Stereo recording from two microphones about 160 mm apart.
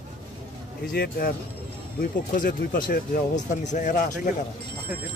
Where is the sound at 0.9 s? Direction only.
70° left (ahead or behind); by 4.1 s 50° left (ahead or behind).